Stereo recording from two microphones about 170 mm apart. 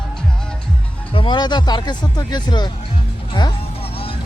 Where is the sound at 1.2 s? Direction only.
25° left (ahead or behind).